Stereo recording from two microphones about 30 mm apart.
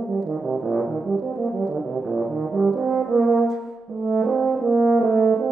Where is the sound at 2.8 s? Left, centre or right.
Left.